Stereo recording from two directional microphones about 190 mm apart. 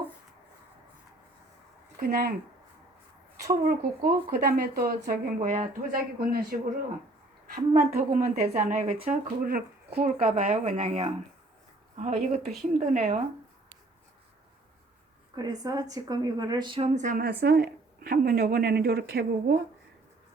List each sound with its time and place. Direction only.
2.0 s speech: 50° right (ahead or behind)
3.6 s speech: 50° right (ahead or behind)
10.8 s speech: 35° right (ahead or behind)
15.4 s a woman's voice: 20° right (ahead or behind); by 17.3 s 45° right (ahead or behind)
17.4 s speech: 60° right (ahead or behind)